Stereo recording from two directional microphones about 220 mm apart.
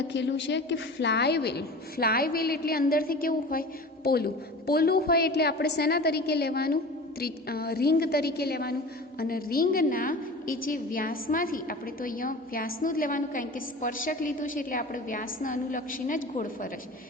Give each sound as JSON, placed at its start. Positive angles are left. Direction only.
{"t": 0.1, "sound": "a woman's voice", "side_deg": 55}